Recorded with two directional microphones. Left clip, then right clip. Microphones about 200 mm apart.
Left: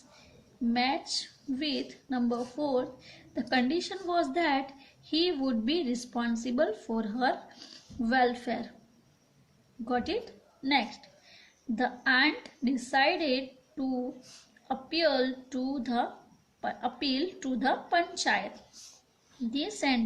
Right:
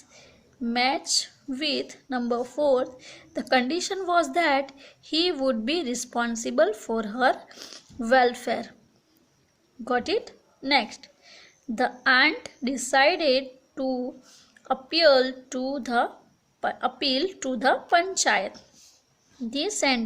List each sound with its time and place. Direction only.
0.7 s a woman's voice: 55° right (ahead or behind)
9.8 s a woman's voice: 60° right (ahead or behind)
19.5 s a woman's voice: 55° right (ahead or behind)